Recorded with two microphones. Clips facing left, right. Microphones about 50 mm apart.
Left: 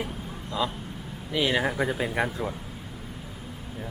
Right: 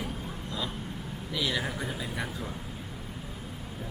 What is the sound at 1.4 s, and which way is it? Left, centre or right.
Speech, left.